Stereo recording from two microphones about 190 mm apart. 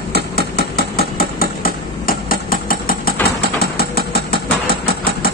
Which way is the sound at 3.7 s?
55° left (ahead or behind).